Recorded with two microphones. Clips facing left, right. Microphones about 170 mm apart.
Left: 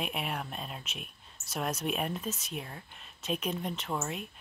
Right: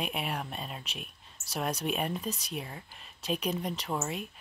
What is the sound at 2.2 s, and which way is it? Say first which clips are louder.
Speech: right 1 dB; 35° right (ahead or behind).